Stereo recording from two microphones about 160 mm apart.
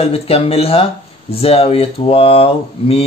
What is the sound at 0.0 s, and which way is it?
Speech, 40° left (ahead or behind).